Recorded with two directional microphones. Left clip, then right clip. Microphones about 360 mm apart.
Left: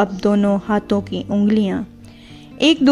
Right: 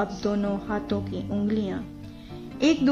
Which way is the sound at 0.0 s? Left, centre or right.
Centre.